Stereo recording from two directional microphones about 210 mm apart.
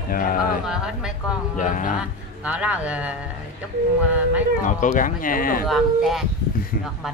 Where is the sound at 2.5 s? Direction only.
5° right (ahead or behind).